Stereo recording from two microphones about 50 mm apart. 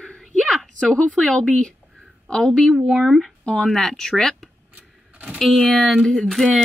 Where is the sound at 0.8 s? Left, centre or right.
Centre.